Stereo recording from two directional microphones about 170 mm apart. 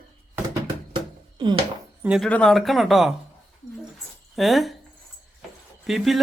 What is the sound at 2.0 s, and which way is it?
A man's voice, 5° right (ahead or behind).